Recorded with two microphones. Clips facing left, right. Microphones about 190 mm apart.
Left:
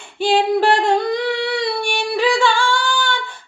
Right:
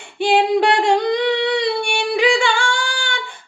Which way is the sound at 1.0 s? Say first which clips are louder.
Right 2 dB; 20° right (ahead or behind).